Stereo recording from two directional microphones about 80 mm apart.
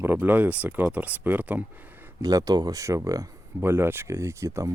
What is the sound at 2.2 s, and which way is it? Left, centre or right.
Speech, right.